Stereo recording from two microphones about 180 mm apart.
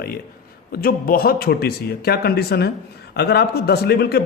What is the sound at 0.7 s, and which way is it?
A man's voice, 55° left (ahead or behind).